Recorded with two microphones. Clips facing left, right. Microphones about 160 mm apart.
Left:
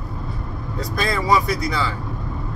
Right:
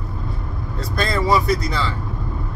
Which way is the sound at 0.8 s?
10° left (ahead or behind).